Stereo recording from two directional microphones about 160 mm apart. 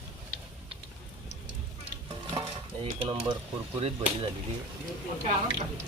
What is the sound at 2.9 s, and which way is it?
Mechanisms, 35° right (ahead or behind).